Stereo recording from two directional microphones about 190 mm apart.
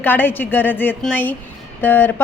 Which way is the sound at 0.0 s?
10° left (ahead or behind).